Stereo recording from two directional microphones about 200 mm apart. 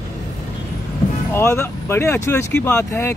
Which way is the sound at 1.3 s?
15° left (ahead or behind).